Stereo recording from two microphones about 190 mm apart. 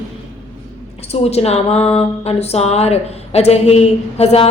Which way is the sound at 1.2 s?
30° left (ahead or behind).